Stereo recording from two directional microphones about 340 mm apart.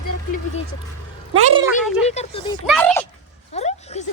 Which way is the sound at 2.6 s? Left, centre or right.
Centre.